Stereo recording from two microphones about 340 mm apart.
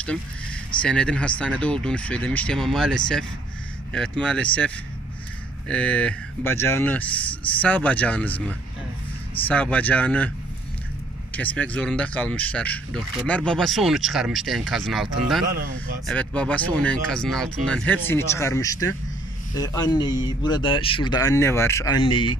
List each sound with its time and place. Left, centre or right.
0.8 s speech: centre
11.3 s speech: centre
15.4 s speech: right
16.1 s speech: centre